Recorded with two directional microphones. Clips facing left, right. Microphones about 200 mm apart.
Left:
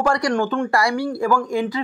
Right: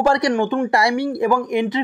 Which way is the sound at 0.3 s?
10° right (ahead or behind).